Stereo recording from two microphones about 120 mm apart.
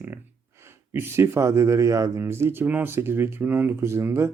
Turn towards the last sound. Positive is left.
turn(degrees=-20)  # may be behind; listen again after turning